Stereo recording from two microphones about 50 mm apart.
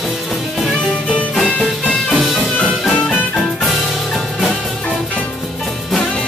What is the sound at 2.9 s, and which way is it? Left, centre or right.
Music, left.